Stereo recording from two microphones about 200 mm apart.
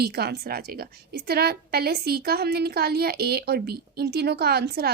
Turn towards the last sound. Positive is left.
turn(degrees=-55)  # may be behind; listen again after turning